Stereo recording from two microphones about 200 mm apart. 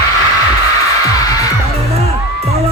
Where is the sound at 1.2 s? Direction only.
15° left (ahead or behind).